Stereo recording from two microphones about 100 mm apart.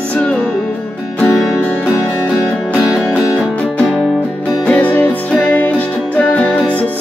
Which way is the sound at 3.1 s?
15° left (ahead or behind).